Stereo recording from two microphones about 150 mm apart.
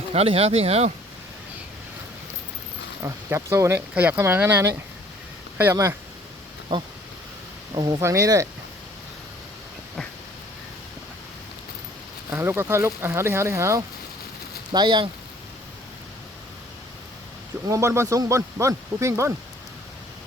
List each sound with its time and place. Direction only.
0.1 s speech: 40° right (ahead or behind)
3.0 s speech: 20° right (ahead or behind)
6.7 s speech: 25° right (ahead or behind)
12.3 s speech: 15° right (ahead or behind)
14.7 s speech: 30° right (ahead or behind)
17.7 s speech: 20° right (ahead or behind)